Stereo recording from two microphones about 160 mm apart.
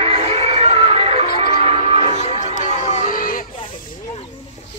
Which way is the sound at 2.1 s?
45° left (ahead or behind).